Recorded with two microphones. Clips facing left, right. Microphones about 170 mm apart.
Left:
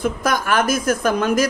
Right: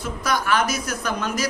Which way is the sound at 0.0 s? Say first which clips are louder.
Left 4 dB; 50° left (ahead or behind).